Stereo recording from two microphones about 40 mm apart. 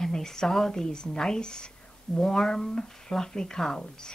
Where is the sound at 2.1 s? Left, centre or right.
Centre.